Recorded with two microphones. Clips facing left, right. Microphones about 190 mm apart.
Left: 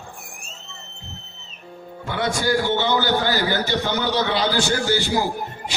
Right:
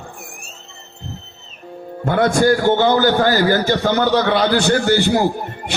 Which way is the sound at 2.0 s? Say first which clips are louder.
Right 9 dB; 50° right (ahead or behind).